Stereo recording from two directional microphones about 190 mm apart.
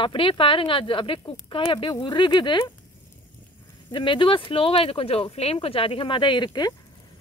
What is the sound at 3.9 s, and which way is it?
Speech, 25° left (ahead or behind).